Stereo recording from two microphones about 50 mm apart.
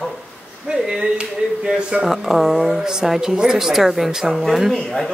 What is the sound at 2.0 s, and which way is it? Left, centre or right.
A woman's voice, centre.